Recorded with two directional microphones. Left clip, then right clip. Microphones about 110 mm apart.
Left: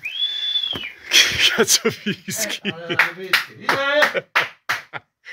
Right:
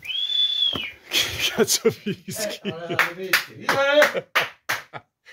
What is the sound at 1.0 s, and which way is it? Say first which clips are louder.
Speech: left 9 dB; 10° right (ahead or behind).